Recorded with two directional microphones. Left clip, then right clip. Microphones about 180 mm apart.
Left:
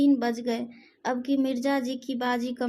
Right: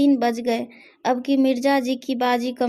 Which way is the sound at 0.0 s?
35° right (ahead or behind).